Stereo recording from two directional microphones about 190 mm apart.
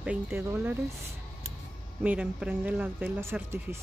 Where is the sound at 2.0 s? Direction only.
5° right (ahead or behind).